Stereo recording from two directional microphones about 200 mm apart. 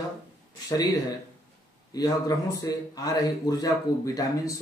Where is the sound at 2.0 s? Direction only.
20° left (ahead or behind).